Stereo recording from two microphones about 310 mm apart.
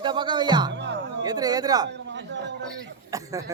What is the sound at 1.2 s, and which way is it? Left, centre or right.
Speech, centre.